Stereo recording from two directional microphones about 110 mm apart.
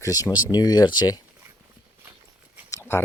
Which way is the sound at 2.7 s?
20° left (ahead or behind).